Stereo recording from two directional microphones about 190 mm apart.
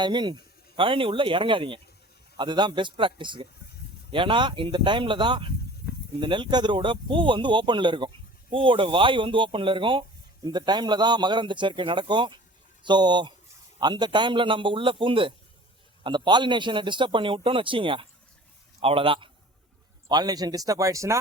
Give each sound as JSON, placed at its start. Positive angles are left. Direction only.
{"t": 0.0, "sound": "a man's voice", "side_deg": -25}